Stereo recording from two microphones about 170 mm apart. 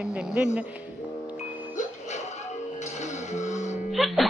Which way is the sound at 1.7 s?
45° left (ahead or behind).